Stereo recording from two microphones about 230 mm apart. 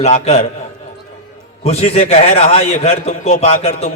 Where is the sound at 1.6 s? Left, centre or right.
Left.